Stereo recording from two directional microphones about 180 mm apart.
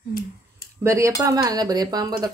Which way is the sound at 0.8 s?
15° right (ahead or behind).